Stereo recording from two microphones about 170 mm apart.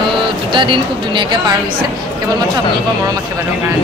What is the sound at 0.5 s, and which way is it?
Speech, 30° right (ahead or behind).